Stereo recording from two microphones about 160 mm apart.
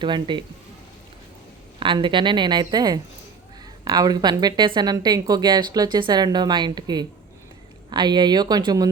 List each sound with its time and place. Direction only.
0.0 s speech: 30° right (ahead or behind)
1.8 s speech: 30° right (ahead or behind)